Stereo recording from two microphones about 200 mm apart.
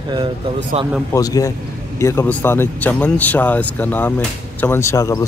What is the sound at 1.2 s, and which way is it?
Speech, 15° left (ahead or behind).